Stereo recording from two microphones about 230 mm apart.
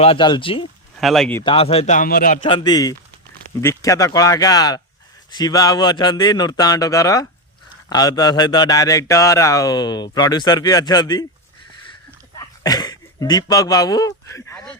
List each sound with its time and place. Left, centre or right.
0.0 s speech: left
1.0 s speech: centre
1.5 s a man's voice: left
2.4 s speech: left
12.4 s a sound: centre